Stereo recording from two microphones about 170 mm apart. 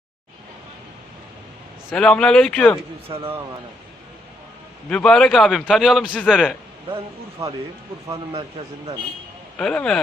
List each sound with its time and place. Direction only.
1.9 s a man's voice: 5° left (ahead or behind)
3.1 s speech: 20° right (ahead or behind)
4.9 s a man's voice: 5° left (ahead or behind)
9.6 s a man's voice: 5° left (ahead or behind)